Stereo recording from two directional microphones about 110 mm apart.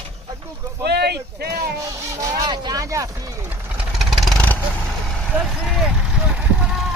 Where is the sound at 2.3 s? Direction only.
40° right (ahead or behind).